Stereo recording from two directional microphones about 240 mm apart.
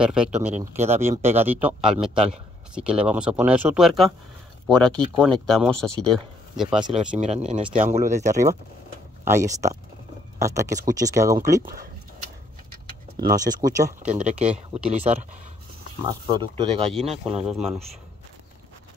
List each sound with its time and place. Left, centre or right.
0.0 s speech: centre
7.2 s speech: right
9.2 s speech: centre
11.6 s speech: right
13.1 s speech: right
13.6 s speech: centre
14.0 s speech: right
16.1 s speech: centre
17.4 s speech: centre